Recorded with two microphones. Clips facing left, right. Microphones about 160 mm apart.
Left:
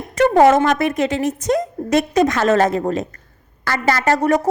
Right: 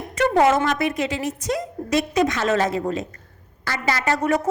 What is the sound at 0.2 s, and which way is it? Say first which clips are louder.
A woman's voice: left 5 dB; 40° left (ahead or behind).